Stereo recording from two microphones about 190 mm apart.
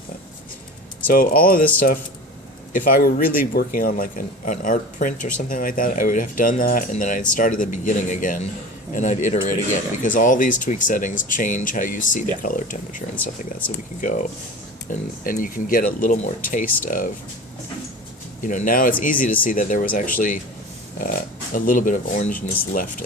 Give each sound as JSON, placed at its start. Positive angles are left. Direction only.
{"t": 1.0, "sound": "a man's voice", "side_deg": 50}
{"t": 14.0, "sound": "a man's voice", "side_deg": 45}
{"t": 18.4, "sound": "a man's voice", "side_deg": 45}